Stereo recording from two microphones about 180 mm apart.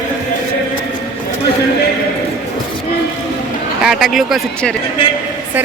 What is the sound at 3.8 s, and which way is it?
Speech, centre (ahead or behind).